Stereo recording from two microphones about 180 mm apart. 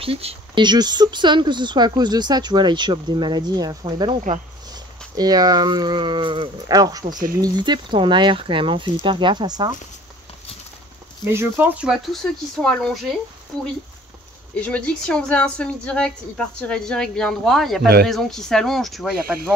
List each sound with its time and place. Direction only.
0.0 s speech: 35° right (ahead or behind)
11.2 s a woman's voice: 15° right (ahead or behind); by 13.0 s 5° left (ahead or behind)
14.5 s a woman's voice: 5° left (ahead or behind)